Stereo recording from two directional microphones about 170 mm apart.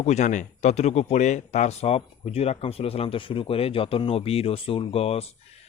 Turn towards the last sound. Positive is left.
turn(degrees=35)  # may be behind; listen again after turning